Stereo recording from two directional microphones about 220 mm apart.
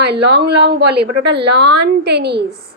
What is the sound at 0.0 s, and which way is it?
A woman's voice, 50° right (ahead or behind).